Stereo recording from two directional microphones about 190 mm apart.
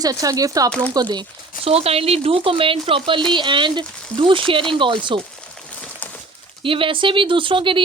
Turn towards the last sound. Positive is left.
turn(degrees=-25)  # may be behind; listen again after turning